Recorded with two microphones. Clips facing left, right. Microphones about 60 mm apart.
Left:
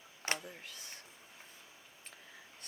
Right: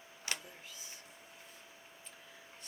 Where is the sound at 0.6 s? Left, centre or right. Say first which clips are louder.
Left 2 dB; left.